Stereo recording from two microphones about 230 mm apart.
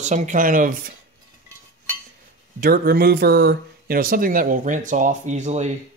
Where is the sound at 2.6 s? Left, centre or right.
Right.